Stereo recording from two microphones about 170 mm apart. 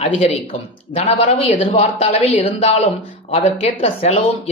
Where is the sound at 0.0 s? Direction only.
35° left (ahead or behind).